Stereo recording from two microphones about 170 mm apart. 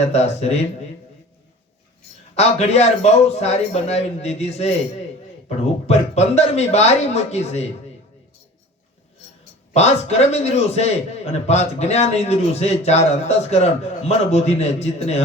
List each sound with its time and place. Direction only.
0.0 s a man's voice: 40° left (ahead or behind)
2.3 s a man's voice: 40° left (ahead or behind)
9.7 s a man's voice: 40° left (ahead or behind)